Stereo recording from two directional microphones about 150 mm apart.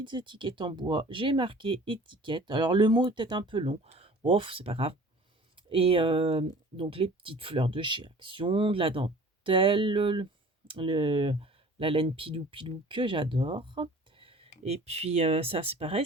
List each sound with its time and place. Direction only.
0.0 s speech: 30° right (ahead or behind)